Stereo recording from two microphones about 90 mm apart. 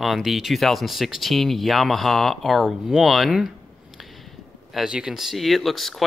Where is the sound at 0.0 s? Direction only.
Centre (ahead or behind).